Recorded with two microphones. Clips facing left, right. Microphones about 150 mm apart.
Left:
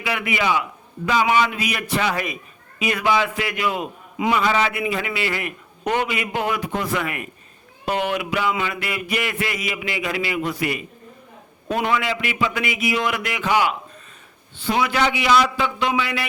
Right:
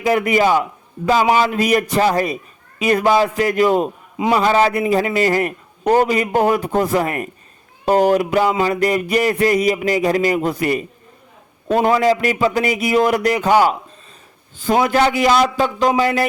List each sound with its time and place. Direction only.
0.0 s a man's voice: 40° right (ahead or behind)